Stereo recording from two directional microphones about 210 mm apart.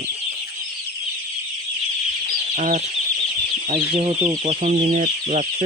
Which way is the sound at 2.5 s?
40° right (ahead or behind).